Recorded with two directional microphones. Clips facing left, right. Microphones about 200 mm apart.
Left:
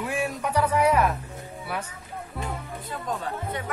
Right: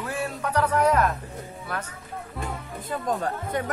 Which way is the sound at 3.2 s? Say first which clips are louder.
Right 4 dB; 45° right (ahead or behind).